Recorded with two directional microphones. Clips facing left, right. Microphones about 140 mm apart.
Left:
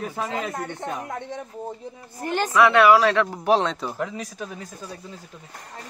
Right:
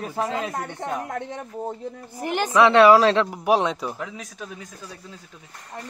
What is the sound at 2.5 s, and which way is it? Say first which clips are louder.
Speech: right 2 dB; 30° right (ahead or behind).